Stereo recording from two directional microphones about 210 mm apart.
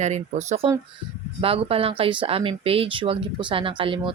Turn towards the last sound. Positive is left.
turn(degrees=-25)  # may be behind; listen again after turning